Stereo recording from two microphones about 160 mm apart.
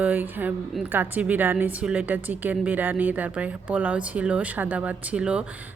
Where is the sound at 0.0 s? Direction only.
10° right (ahead or behind).